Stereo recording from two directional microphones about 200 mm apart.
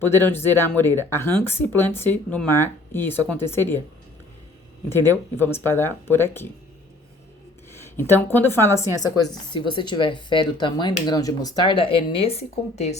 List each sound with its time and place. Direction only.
0.1 s speech: 10° left (ahead or behind)
5.4 s speech: 10° left (ahead or behind)
7.7 s speech: 10° left (ahead or behind); by 13.0 s 35° left (ahead or behind)